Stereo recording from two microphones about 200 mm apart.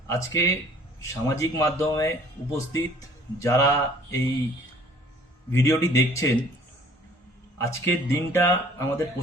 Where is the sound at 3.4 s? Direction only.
15° left (ahead or behind).